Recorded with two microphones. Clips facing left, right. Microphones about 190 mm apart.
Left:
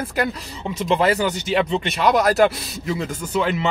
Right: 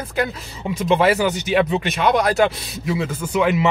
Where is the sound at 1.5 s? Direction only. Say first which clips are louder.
Right 2 dB; 5° right (ahead or behind).